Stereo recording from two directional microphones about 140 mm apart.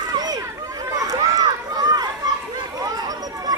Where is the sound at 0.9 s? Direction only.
25° right (ahead or behind).